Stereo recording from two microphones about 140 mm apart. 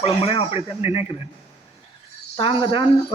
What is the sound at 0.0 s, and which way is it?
Speech, 45° left (ahead or behind).